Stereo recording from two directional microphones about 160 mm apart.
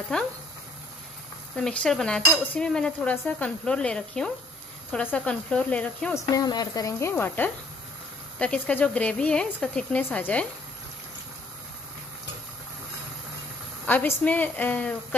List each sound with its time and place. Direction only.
0.1 s cutlery: 5° left (ahead or behind)
1.6 s cutlery: 5° left (ahead or behind)
4.9 s speech: 5° left (ahead or behind)
6.1 s speech: 25° left (ahead or behind); by 10.4 s 5° left (ahead or behind)
13.8 s speech: 10° left (ahead or behind)